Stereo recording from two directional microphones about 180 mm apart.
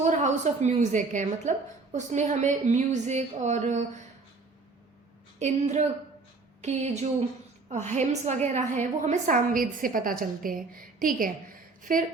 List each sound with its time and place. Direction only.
0.0 s a woman's voice: 40° right (ahead or behind)
5.4 s a woman's voice: 40° right (ahead or behind)